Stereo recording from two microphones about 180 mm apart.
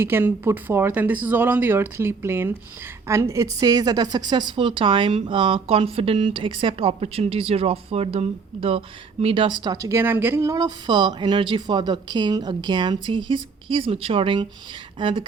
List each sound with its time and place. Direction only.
0.0 s speech: 10° right (ahead or behind); by 15.2 s 30° right (ahead or behind)